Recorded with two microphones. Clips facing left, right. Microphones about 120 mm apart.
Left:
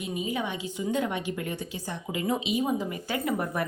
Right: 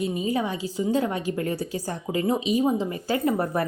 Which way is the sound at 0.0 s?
35° right (ahead or behind).